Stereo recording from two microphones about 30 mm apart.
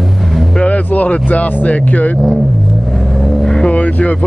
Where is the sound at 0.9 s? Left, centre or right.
Left.